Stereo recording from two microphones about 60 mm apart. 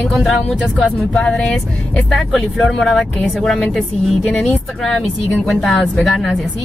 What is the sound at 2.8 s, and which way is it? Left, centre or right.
Speech, centre.